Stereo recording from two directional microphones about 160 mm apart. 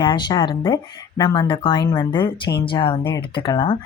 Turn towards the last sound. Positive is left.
turn(degrees=30)  # may be behind; listen again after turning